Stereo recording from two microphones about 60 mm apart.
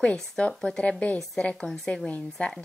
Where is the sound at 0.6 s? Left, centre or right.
Centre.